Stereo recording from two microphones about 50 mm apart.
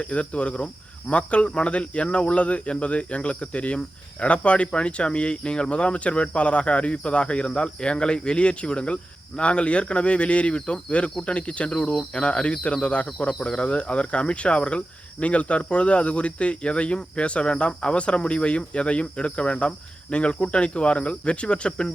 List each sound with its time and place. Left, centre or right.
0.0 s speech: left